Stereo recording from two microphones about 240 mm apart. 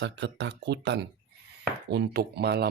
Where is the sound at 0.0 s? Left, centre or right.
Right.